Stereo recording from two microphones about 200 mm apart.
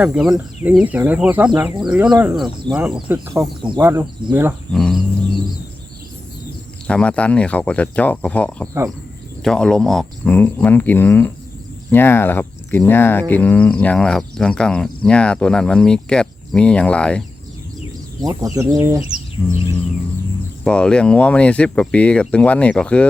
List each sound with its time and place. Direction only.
0.0 s speech: 5° right (ahead or behind)
4.7 s speech: centre (ahead or behind)
6.8 s speech: 5° left (ahead or behind)
18.2 s speech: 15° right (ahead or behind)
19.4 s speech: 10° left (ahead or behind)
20.7 s speech: 5° left (ahead or behind)